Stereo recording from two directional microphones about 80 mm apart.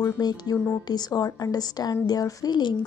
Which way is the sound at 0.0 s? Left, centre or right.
Left.